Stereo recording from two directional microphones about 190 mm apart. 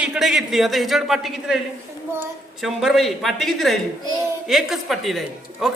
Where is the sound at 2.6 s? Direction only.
Centre (ahead or behind).